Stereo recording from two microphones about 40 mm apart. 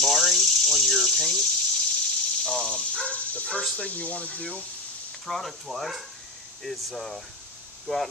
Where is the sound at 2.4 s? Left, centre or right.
Centre.